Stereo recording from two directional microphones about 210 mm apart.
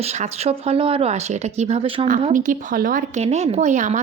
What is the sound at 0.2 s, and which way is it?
A woman's voice, 30° right (ahead or behind).